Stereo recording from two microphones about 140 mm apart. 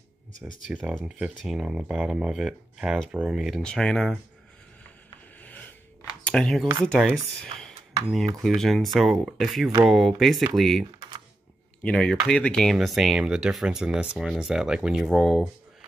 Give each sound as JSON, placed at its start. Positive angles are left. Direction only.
{"t": 0.7, "sound": "speech", "side_deg": -5}
{"t": 5.4, "sound": "a sound", "side_deg": 10}
{"t": 6.2, "sound": "speech", "side_deg": 5}